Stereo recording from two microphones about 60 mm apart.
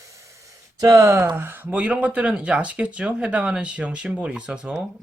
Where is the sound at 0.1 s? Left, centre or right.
Right.